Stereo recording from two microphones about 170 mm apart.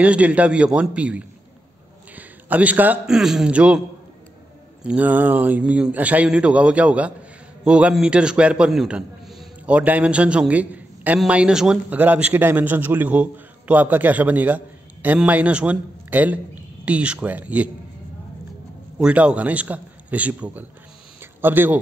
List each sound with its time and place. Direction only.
0.0 s a man's voice: 10° right (ahead or behind)
4.8 s a man's voice: 10° right (ahead or behind)
18.9 s a man's voice: 5° right (ahead or behind)
21.2 s a sound: 10° right (ahead or behind)